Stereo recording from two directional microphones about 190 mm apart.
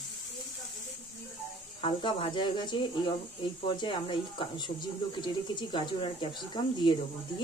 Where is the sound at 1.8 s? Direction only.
30° left (ahead or behind).